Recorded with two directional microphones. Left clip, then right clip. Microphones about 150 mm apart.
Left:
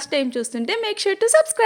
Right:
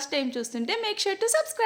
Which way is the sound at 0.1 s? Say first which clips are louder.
Left 8 dB; 40° left (ahead or behind).